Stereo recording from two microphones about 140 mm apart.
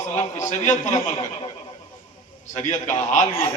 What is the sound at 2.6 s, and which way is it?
Speech, 60° left (ahead or behind).